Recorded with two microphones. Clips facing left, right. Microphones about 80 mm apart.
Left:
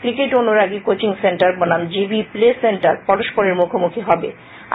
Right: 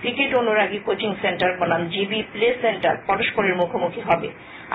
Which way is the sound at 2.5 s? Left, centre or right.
Centre.